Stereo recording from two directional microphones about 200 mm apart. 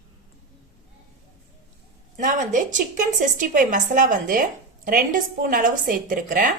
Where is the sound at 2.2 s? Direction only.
40° right (ahead or behind).